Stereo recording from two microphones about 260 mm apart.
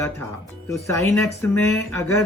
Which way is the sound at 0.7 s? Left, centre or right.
Centre.